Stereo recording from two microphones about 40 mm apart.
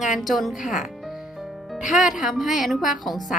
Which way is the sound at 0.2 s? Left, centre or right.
Centre.